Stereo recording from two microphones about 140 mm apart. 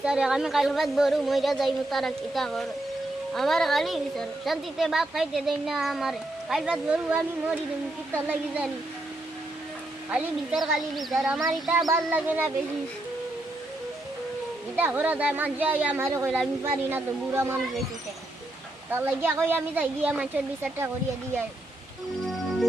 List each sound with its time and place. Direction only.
0.0 s a woman's voice: 5° right (ahead or behind)
10.1 s a woman's voice: 5° right (ahead or behind)
12.1 s speech: 10° right (ahead or behind)
14.8 s speech: 15° right (ahead or behind)
18.9 s speech: 15° right (ahead or behind)